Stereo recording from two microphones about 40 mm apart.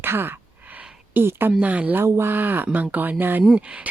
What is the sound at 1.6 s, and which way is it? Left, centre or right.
Speech, right.